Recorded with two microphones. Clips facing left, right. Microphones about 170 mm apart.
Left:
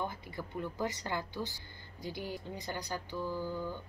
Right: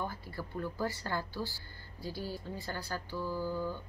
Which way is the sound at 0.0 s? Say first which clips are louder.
Even; 20° left (ahead or behind).